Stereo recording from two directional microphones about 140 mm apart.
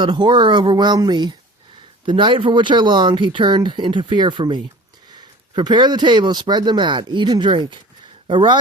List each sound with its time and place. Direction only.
0.0 s speech: 30° right (ahead or behind)